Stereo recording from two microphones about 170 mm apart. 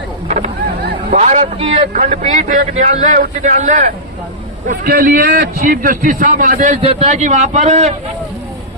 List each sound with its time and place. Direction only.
0.3 s honk: 45° right (ahead or behind)
1.1 s a man's voice: 45° right (ahead or behind)
4.7 s a man's voice: 60° right (ahead or behind); by 7.9 s 40° right (ahead or behind)